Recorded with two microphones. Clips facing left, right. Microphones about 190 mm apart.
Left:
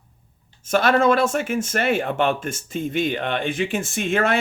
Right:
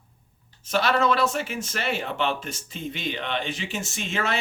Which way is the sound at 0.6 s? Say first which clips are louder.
Left 5 dB; 50° left (ahead or behind).